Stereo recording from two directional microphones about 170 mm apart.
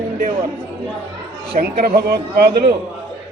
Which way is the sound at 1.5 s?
60° right (ahead or behind).